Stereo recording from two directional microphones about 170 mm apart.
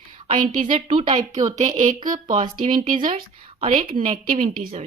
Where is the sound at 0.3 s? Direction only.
50° right (ahead or behind).